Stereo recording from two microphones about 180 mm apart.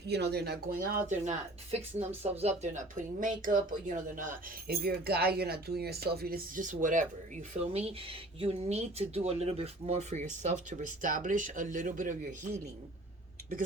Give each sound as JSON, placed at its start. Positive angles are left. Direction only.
{"t": 0.1, "sound": "speech", "side_deg": -65}
{"t": 7.5, "sound": "speech", "side_deg": -35}